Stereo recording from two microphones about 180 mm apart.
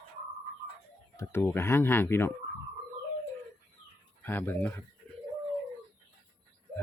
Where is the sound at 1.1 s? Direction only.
10° left (ahead or behind).